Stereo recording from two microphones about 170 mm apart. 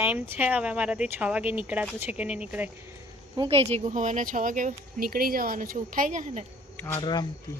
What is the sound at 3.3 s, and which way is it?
Speech, 25° right (ahead or behind).